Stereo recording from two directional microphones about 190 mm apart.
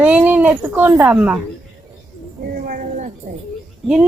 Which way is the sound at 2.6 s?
45° right (ahead or behind).